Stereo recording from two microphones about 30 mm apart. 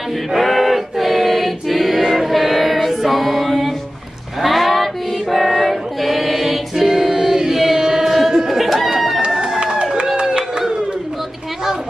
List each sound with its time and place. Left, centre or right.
0.3 s choir: centre
4.4 s music: centre
6.9 s music: centre
8.1 s music: centre
8.5 s a sound: centre
9.7 s run: right